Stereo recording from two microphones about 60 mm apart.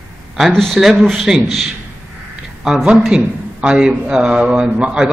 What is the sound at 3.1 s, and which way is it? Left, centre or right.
A man's voice, centre.